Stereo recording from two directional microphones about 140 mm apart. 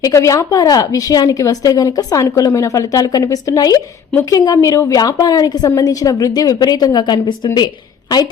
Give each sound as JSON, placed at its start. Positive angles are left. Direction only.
{"t": 0.0, "sound": "a woman's voice", "side_deg": 20}